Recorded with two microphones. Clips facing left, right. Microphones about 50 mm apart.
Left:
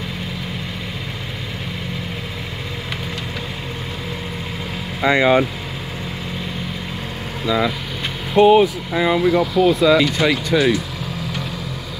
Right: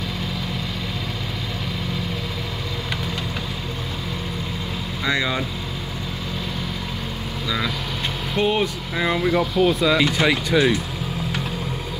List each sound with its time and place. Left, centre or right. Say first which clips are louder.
5.0 s speech: left 9 dB; left
7.4 s speech: left 6 dB; centre